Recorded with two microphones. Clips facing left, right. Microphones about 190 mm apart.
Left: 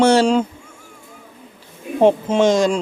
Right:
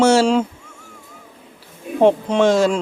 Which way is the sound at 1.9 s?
Centre (ahead or behind).